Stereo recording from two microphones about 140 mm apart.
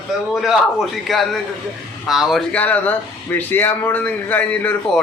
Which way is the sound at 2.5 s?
10° left (ahead or behind).